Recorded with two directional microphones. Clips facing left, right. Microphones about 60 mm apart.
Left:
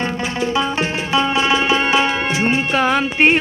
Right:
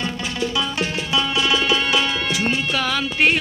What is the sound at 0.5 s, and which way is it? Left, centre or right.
Music, left.